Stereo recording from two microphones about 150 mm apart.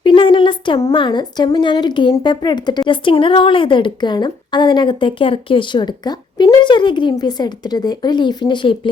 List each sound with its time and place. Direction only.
0.0 s a woman's voice: 35° left (ahead or behind)